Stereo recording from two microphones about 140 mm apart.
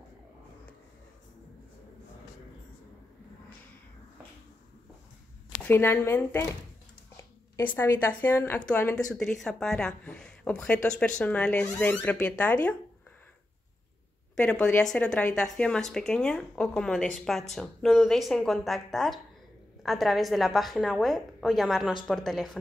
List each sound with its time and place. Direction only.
5.7 s speech: 15° left (ahead or behind)
7.5 s speech: 15° left (ahead or behind)
14.3 s speech: 5° left (ahead or behind)